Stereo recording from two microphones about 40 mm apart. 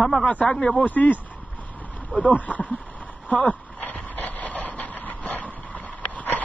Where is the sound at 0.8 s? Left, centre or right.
Left.